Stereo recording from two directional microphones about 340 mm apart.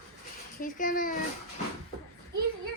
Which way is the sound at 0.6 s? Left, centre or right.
Left.